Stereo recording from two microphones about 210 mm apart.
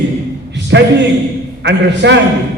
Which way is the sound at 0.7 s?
60° right (ahead or behind).